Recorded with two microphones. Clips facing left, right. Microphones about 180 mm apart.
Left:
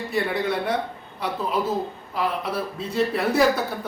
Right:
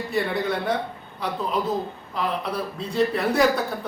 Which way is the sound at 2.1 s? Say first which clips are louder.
Left 1 dB; 5° left (ahead or behind).